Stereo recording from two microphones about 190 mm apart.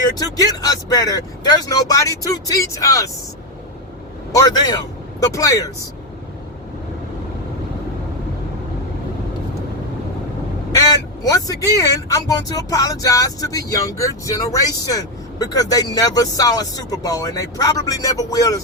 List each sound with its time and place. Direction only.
0.2 s speech: 20° left (ahead or behind)
4.3 s a man's voice: 20° left (ahead or behind)
10.7 s speech: 20° left (ahead or behind)